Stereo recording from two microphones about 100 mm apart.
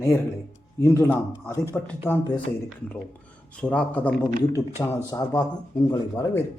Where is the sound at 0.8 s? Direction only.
25° left (ahead or behind).